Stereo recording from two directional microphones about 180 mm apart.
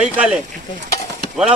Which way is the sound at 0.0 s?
5° right (ahead or behind).